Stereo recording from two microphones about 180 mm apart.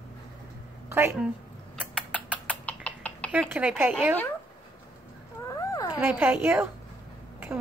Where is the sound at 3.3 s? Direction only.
10° right (ahead or behind).